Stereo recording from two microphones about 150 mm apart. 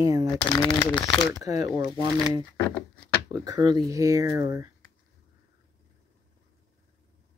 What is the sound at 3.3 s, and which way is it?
Speech, 25° right (ahead or behind).